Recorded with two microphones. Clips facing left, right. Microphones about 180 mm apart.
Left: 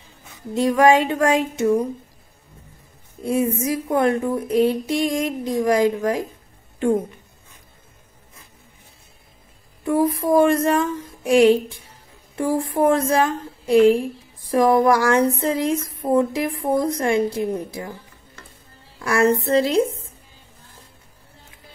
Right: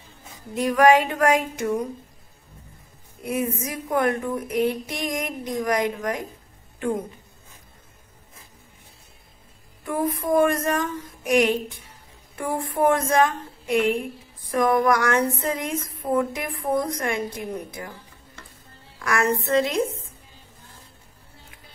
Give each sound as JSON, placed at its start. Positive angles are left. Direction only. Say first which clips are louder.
{"t": 0.6, "sound": "a woman's voice", "louder": "left 2 dB", "side_deg": 25}
{"t": 3.3, "sound": "a woman's voice", "louder": "left 6 dB", "side_deg": 30}
{"t": 9.8, "sound": "a woman's voice", "louder": "left 5 dB", "side_deg": 30}
{"t": 18.9, "sound": "a woman's voice", "louder": "left 5 dB", "side_deg": 30}